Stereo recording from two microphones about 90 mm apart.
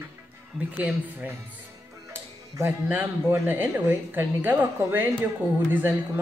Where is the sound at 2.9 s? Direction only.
20° right (ahead or behind).